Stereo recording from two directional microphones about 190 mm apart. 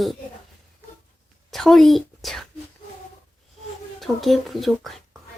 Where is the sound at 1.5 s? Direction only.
Centre (ahead or behind).